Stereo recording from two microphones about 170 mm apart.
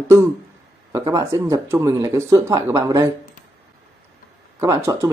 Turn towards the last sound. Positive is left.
turn(degrees=-15)  # may be behind; listen again after turning